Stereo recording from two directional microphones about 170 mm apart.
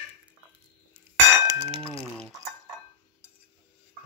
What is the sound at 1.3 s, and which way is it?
Chink, 25° right (ahead or behind).